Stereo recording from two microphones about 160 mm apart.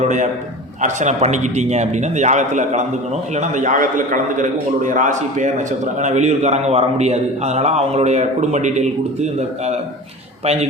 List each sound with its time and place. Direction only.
0.0 s a man's voice: 50° right (ahead or behind)
10.4 s a man's voice: 40° right (ahead or behind)